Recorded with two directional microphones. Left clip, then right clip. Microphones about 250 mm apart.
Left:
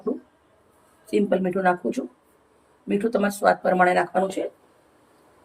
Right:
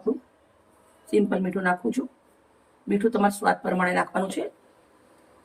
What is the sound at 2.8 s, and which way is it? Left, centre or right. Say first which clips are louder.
Speech: even; centre.